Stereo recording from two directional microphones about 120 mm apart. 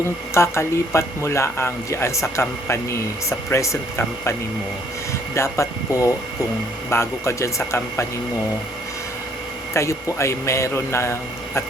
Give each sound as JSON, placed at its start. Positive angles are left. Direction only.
{"t": 0.3, "sound": "speech", "side_deg": 20}
{"t": 9.7, "sound": "speech", "side_deg": 25}